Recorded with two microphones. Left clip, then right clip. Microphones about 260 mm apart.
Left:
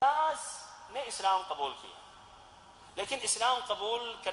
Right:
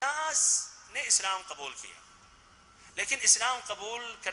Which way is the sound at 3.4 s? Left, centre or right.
Right.